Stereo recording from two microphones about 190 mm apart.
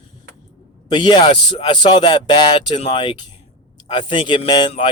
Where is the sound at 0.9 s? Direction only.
25° left (ahead or behind).